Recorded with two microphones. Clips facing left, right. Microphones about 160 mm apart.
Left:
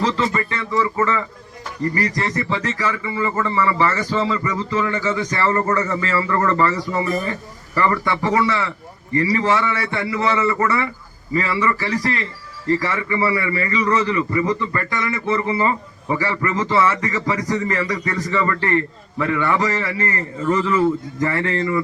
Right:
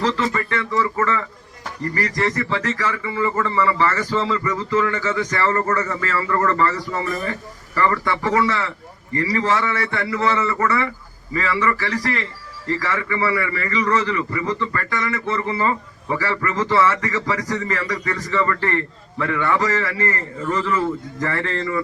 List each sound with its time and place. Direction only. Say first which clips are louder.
0.0 s a man's voice: left 1 dB; 20° left (ahead or behind)